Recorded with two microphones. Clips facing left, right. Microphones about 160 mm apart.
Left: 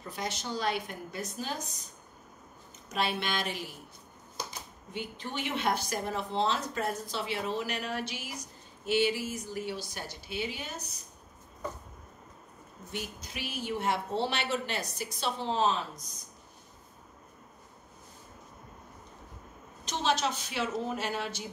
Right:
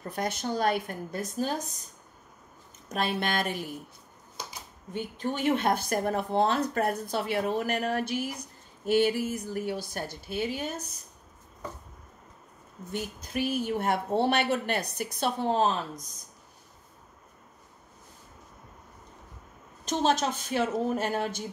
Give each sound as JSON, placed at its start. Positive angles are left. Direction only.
{"t": 0.1, "sound": "speech", "side_deg": -55}
{"t": 2.9, "sound": "speech", "side_deg": -50}
{"t": 4.9, "sound": "speech", "side_deg": -45}
{"t": 12.9, "sound": "speech", "side_deg": -50}
{"t": 19.8, "sound": "speech", "side_deg": -45}